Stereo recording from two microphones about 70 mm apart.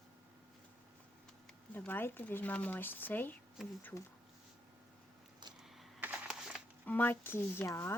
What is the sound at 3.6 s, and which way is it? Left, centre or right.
Speech, centre.